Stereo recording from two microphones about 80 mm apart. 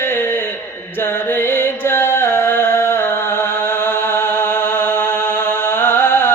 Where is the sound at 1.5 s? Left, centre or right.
Left.